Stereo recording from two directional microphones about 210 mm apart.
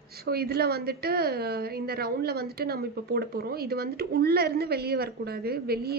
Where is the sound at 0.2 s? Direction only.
45° right (ahead or behind).